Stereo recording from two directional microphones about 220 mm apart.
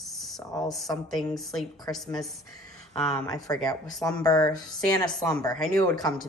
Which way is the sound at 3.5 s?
15° left (ahead or behind).